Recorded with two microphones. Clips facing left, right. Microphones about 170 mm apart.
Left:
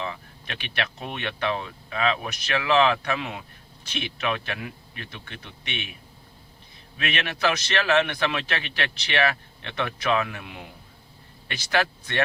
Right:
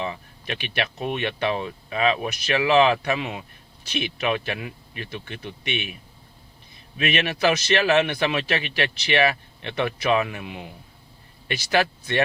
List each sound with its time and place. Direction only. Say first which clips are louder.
0.0 s a man's voice: right 3 dB; 15° right (ahead or behind)
7.0 s a man's voice: right 4 dB; 15° right (ahead or behind)